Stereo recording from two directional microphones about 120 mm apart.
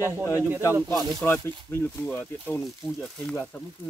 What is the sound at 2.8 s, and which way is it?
Speech, 5° left (ahead or behind).